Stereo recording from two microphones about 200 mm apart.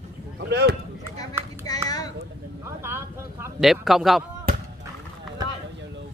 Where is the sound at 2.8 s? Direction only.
15° right (ahead or behind).